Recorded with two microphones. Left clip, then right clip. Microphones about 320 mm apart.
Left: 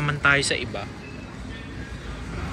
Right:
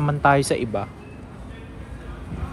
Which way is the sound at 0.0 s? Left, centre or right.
Centre.